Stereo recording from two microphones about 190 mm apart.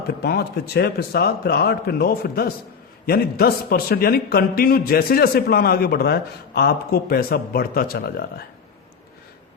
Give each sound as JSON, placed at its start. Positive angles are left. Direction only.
{"t": 0.2, "sound": "a man's voice", "side_deg": 55}